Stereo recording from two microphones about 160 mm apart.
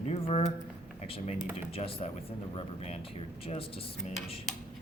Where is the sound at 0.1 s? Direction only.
40° left (ahead or behind).